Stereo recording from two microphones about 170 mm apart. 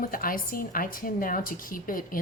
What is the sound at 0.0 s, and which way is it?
A woman's voice, 55° left (ahead or behind).